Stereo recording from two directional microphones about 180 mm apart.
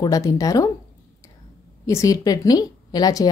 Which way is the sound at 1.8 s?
20° left (ahead or behind).